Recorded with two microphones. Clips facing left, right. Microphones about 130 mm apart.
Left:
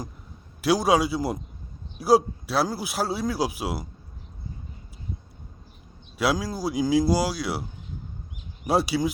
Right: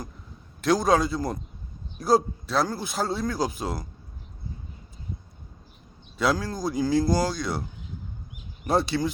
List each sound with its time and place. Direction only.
0.6 s speech: 10° left (ahead or behind)
6.1 s speech: 5° left (ahead or behind)
8.6 s speech: 10° left (ahead or behind)